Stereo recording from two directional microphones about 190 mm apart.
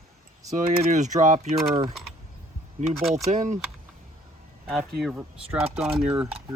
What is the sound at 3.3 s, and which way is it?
Speech, 40° right (ahead or behind).